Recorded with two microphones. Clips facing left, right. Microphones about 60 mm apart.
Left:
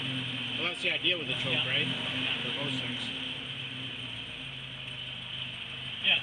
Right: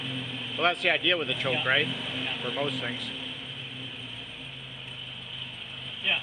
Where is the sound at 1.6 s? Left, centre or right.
Right.